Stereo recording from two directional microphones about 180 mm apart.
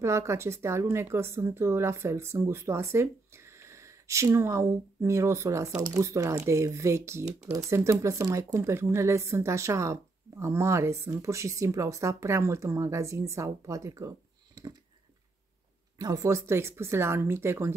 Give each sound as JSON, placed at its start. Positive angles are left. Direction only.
{"t": 0.0, "sound": "speech", "side_deg": -15}
{"t": 16.0, "sound": "speech", "side_deg": -20}